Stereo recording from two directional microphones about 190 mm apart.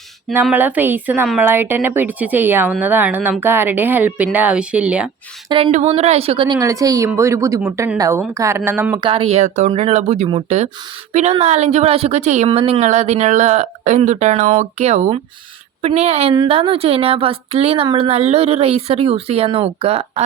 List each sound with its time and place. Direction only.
0.5 s speech: 10° right (ahead or behind)
5.5 s a woman's voice: 25° right (ahead or behind)
9.0 s a woman's voice: 30° right (ahead or behind)